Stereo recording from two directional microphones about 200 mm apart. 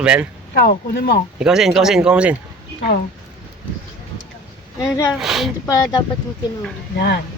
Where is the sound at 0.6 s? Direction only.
50° left (ahead or behind).